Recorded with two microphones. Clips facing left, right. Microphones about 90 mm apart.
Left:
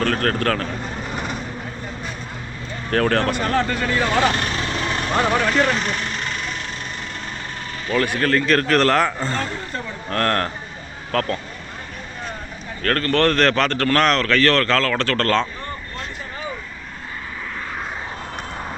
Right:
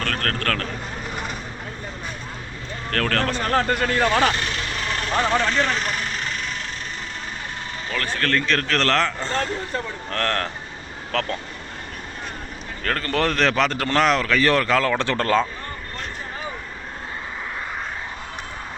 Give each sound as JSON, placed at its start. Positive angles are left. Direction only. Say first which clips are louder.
{"t": 0.0, "sound": "a man's voice", "louder": "left 5 dB", "side_deg": 10}
{"t": 2.9, "sound": "a man's voice", "louder": "left 4 dB", "side_deg": 10}
{"t": 3.5, "sound": "speech", "louder": "even", "side_deg": -60}
{"t": 5.1, "sound": "speech", "louder": "left 2 dB", "side_deg": 15}
{"t": 7.9, "sound": "a man's voice", "louder": "left 5 dB", "side_deg": 15}
{"t": 12.8, "sound": "speech", "louder": "left 4 dB", "side_deg": -10}